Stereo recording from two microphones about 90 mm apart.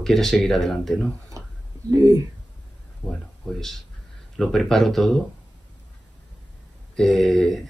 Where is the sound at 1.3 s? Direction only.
35° right (ahead or behind).